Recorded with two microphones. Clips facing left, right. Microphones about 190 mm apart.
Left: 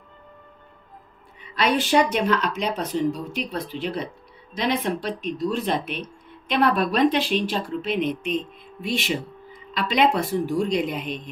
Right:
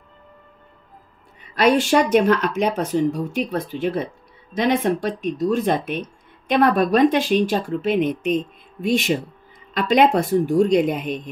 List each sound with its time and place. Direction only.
1.4 s speech: 45° right (ahead or behind)